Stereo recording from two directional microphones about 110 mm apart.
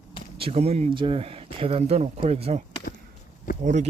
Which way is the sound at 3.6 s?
90° right.